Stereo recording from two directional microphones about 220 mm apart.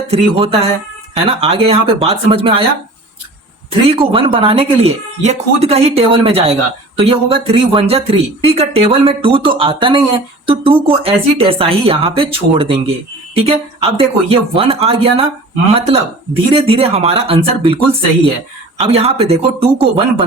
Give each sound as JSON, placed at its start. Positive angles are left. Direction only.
{"t": 0.1, "sound": "speech", "side_deg": -25}
{"t": 3.7, "sound": "speech", "side_deg": -25}
{"t": 18.8, "sound": "speech", "side_deg": -25}